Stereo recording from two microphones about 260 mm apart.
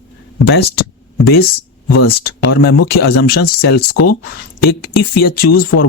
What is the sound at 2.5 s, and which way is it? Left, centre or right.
Speech, left.